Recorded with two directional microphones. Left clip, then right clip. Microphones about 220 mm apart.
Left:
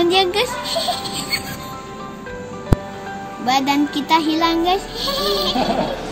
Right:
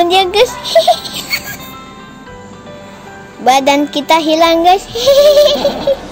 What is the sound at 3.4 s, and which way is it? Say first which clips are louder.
A child's voice: right 8 dB; 45° right (ahead or behind).